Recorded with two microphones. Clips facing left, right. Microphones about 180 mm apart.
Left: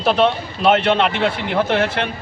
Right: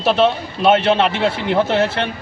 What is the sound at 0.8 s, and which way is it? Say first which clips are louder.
A man's voice: right 1 dB; 30° right (ahead or behind).